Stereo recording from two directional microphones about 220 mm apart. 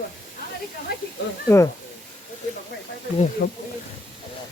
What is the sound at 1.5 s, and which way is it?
Speech, 15° left (ahead or behind).